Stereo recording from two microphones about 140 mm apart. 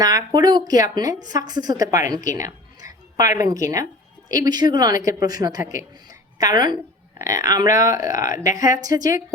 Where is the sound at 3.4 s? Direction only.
25° right (ahead or behind).